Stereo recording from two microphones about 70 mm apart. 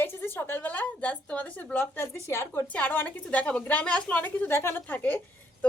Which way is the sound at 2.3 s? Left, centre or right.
Left.